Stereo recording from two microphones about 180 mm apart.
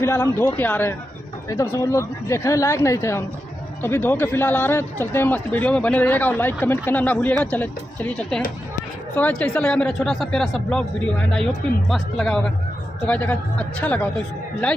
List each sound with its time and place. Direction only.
0.0 s a man's voice: 15° left (ahead or behind)